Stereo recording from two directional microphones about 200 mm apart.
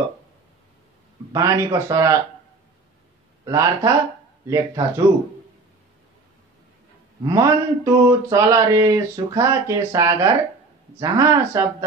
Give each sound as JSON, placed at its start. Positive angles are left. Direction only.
{"t": 1.3, "sound": "speech", "side_deg": -15}
{"t": 3.4, "sound": "speech", "side_deg": -15}
{"t": 7.2, "sound": "speech", "side_deg": -15}